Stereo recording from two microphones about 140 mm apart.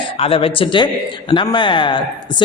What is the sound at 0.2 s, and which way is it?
A man's voice, 40° left (ahead or behind).